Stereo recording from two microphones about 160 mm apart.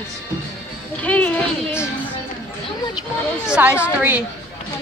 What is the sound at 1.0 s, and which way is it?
Speech, 10° left (ahead or behind).